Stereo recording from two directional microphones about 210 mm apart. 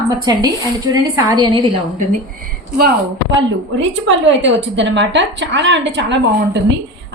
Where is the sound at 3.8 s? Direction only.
60° right (ahead or behind).